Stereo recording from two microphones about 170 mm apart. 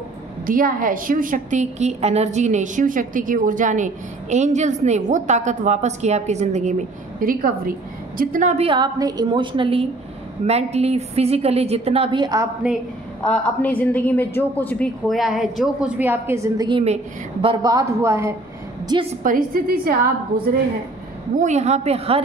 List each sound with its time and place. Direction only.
0.5 s a woman's voice: 55° right (ahead or behind)
7.2 s a woman's voice: 55° right (ahead or behind)
8.6 s a woman's voice: 25° right (ahead or behind)
13.2 s a woman's voice: 10° left (ahead or behind); by 16.8 s 25° right (ahead or behind)
16.8 s a woman's voice: 35° right (ahead or behind); by 18.3 s 15° right (ahead or behind)
19.2 s a woman's voice: 60° right (ahead or behind)
21.4 s a woman's voice: 40° right (ahead or behind)